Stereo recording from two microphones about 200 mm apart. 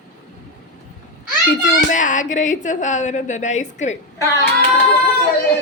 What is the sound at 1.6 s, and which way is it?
A woman's voice, 40° left (ahead or behind).